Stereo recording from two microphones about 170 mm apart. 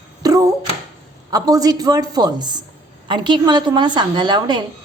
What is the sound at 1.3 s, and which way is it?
A woman's voice, 20° right (ahead or behind).